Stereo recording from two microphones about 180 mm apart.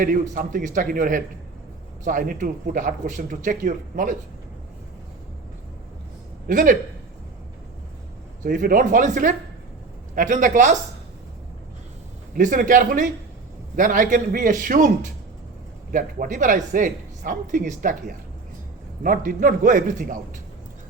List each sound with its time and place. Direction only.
0.0 s speech: 50° right (ahead or behind)
6.5 s speech: 50° right (ahead or behind)
8.4 s speech: 50° right (ahead or behind)
12.4 s speech: 45° right (ahead or behind)
19.0 s speech: 50° right (ahead or behind)